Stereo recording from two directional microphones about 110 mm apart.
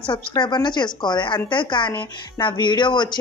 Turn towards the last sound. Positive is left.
turn(degrees=45)  # may be behind; listen again after turning